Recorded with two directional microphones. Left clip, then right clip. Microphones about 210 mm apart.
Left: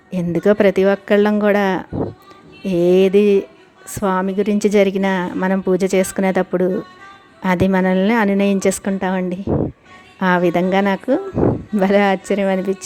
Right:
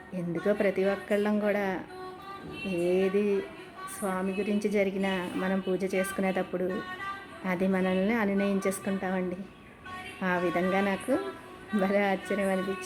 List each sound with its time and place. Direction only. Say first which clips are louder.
0.1 s a woman's voice: left 13 dB; 45° left (ahead or behind)